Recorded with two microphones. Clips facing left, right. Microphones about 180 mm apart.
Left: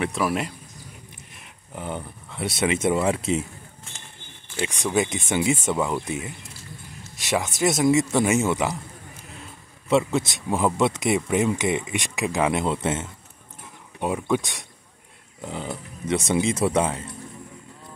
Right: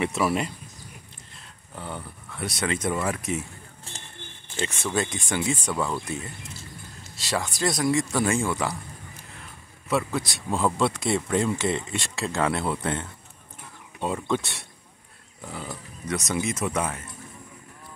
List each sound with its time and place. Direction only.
0.0 s speech: centre (ahead or behind)
1.3 s speech: 15° left (ahead or behind)
4.6 s speech: 15° left (ahead or behind)
9.8 s speech: 25° left (ahead or behind)